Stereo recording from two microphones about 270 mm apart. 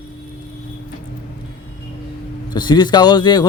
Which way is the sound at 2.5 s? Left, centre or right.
Centre.